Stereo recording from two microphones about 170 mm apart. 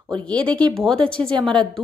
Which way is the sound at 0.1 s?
5° left (ahead or behind).